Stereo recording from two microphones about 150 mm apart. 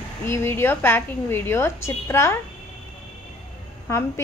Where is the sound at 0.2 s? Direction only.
15° left (ahead or behind).